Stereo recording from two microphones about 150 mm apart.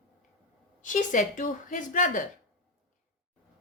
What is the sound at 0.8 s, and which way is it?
A woman's voice, 60° left (ahead or behind).